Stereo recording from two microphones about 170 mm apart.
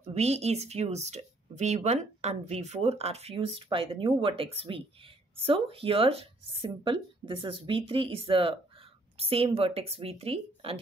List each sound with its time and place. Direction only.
0.0 s speech: 40° right (ahead or behind)